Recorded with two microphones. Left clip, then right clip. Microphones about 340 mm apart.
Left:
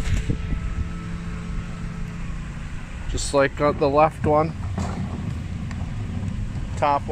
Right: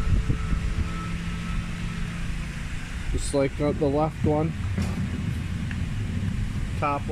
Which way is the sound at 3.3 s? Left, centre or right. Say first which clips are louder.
Left 6 dB; left.